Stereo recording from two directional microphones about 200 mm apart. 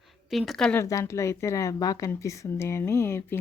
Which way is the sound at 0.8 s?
15° left (ahead or behind).